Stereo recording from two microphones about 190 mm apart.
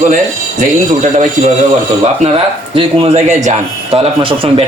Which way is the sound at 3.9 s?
30° right (ahead or behind).